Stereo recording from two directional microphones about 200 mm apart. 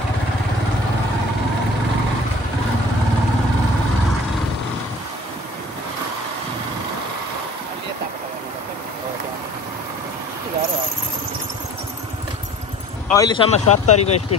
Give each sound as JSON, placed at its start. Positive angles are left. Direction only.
{"t": 13.1, "sound": "speech", "side_deg": 20}